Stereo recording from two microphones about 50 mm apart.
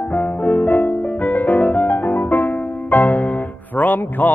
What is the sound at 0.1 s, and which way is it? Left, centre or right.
Music, left.